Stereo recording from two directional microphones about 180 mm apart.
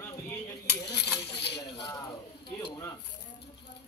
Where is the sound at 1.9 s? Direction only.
25° left (ahead or behind).